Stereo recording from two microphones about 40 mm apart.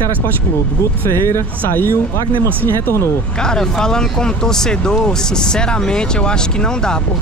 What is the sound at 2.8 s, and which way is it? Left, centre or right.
Speech, left.